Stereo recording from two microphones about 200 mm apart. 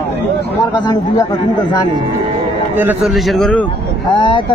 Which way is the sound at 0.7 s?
20° left (ahead or behind).